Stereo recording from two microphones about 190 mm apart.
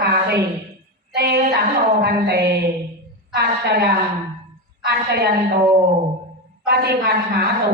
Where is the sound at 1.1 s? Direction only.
55° right (ahead or behind).